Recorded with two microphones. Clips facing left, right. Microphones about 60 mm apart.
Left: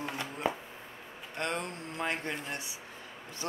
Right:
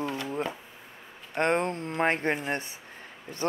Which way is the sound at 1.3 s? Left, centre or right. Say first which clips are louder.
Right 9 dB; right.